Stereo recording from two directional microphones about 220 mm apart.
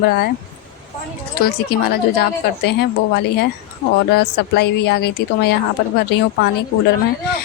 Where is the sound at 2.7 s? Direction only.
50° left (ahead or behind).